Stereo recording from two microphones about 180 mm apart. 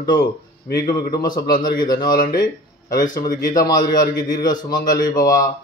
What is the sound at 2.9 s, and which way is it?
Speech, 50° left (ahead or behind).